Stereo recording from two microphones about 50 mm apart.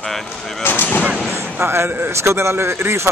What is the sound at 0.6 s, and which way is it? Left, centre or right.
Artillery fire, left.